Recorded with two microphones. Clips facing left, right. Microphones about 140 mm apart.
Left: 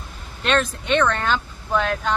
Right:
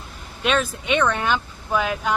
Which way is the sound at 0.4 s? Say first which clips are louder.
Left 1 dB; 5° right (ahead or behind).